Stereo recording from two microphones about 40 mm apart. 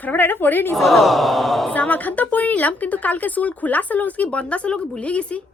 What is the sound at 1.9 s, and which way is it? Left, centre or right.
Speech, left.